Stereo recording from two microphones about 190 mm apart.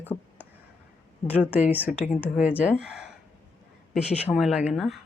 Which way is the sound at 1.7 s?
10° right (ahead or behind).